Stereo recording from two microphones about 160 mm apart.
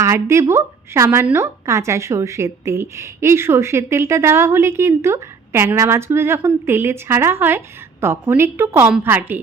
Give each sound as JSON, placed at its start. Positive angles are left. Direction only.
{"t": 0.0, "sound": "speech", "side_deg": -15}